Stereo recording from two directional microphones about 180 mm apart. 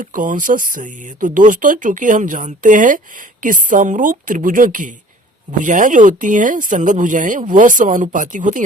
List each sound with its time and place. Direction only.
0.0 s speech: 50° right (ahead or behind)